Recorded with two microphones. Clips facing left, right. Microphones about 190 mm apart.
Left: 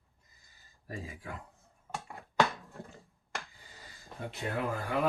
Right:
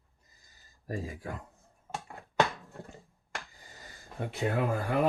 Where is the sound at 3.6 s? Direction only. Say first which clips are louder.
Right 1 dB; 50° right (ahead or behind).